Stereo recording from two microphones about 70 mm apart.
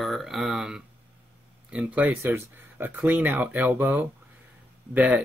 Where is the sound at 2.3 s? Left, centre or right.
Right.